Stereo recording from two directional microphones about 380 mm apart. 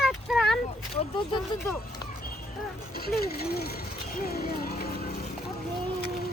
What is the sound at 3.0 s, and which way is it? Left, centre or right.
Speech, left.